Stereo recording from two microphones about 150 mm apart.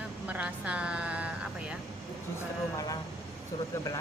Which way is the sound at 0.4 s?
10° right (ahead or behind).